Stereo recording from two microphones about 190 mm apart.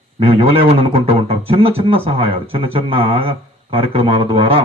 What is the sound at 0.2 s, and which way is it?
Speech, 30° right (ahead or behind).